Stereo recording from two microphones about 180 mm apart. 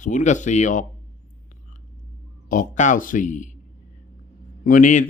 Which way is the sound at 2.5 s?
45° left (ahead or behind).